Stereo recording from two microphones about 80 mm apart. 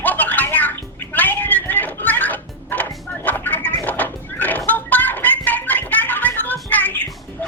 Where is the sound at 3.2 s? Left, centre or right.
Left.